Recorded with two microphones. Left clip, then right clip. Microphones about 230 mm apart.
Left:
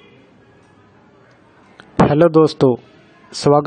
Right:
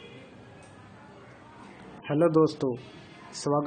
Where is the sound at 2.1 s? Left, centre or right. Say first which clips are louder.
Left 8 dB; left.